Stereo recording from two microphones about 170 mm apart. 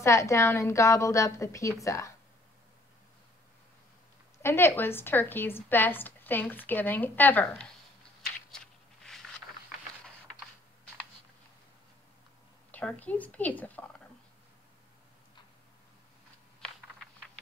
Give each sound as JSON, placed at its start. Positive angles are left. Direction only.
{"t": 0.0, "sound": "a woman's voice", "side_deg": 15}
{"t": 4.4, "sound": "a woman's voice", "side_deg": 15}
{"t": 8.5, "sound": "a sound", "side_deg": 5}
{"t": 12.7, "sound": "a woman's voice", "side_deg": 10}